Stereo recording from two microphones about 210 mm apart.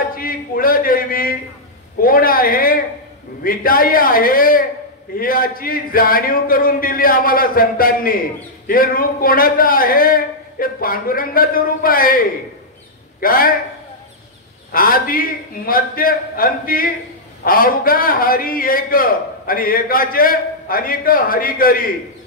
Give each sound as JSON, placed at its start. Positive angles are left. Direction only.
{"t": 0.1, "sound": "a sound", "side_deg": 45}
{"t": 3.4, "sound": "a man's voice", "side_deg": 45}
{"t": 14.7, "sound": "a man's voice", "side_deg": 45}